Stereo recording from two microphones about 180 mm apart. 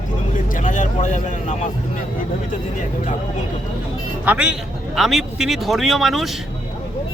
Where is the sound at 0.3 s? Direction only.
45° left (ahead or behind).